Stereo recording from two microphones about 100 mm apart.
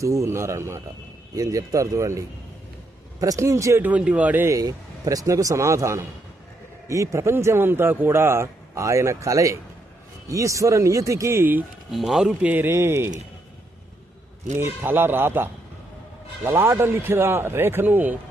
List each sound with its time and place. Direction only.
0.0 s a man's voice: 30° right (ahead or behind)
3.8 s speech: 15° right (ahead or behind)
4.4 s a man's voice: 35° right (ahead or behind)
11.9 s speech: centre (ahead or behind); by 13.1 s 25° right (ahead or behind)
14.5 s speech: 25° right (ahead or behind)